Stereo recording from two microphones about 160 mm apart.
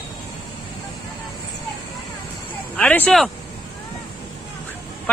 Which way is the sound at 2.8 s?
10° left (ahead or behind).